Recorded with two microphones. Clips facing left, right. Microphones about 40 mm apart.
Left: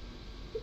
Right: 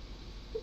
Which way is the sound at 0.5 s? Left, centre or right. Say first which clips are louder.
Even; left.